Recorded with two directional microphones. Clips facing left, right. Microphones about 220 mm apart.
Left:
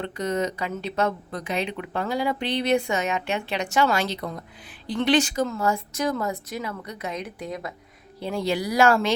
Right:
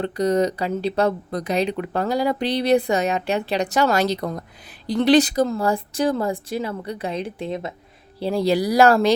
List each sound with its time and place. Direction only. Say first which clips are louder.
0.0 s speech: right 7 dB; 35° right (ahead or behind)